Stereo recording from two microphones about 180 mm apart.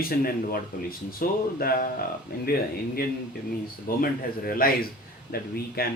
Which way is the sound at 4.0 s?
55° left (ahead or behind).